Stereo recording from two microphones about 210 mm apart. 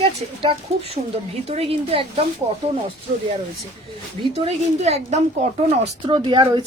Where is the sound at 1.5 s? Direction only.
30° right (ahead or behind).